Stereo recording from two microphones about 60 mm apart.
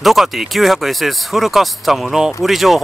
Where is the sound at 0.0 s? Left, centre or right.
Centre.